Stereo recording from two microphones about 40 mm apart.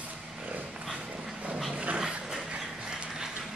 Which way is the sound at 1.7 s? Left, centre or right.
Right.